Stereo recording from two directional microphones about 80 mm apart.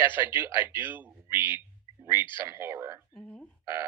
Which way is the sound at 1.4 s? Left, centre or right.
Left.